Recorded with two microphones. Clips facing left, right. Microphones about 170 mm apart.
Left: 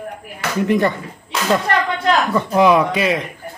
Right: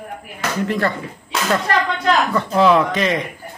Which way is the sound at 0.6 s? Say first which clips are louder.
Left 5 dB; 20° left (ahead or behind).